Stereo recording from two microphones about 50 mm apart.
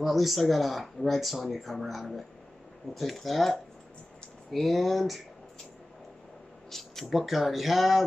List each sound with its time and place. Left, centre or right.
0.0 s speech: centre
6.7 s speech: centre